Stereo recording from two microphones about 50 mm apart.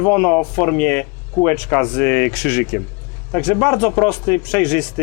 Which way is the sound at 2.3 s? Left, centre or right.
Centre.